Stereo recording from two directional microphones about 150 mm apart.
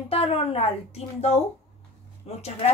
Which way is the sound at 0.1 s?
40° left (ahead or behind).